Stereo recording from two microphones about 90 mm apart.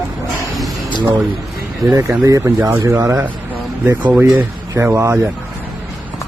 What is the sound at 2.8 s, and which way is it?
Speech, 35° right (ahead or behind).